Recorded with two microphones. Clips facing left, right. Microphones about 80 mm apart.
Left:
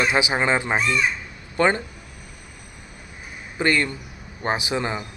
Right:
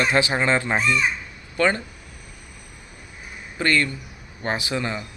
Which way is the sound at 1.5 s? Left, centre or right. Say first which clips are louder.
Left 1 dB; left.